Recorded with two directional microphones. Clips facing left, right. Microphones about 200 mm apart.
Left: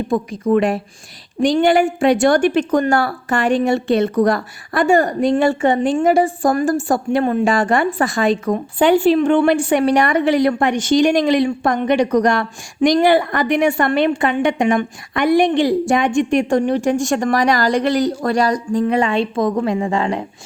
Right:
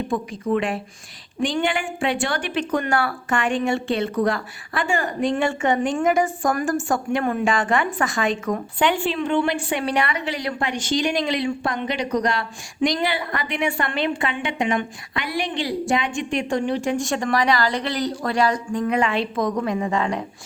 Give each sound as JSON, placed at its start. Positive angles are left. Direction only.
{"t": 0.1, "sound": "a woman's voice", "side_deg": 40}